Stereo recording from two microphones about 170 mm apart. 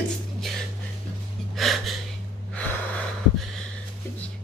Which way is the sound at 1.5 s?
Centre (ahead or behind).